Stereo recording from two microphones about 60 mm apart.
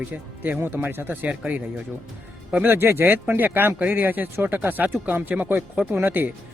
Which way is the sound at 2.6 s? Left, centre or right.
Right.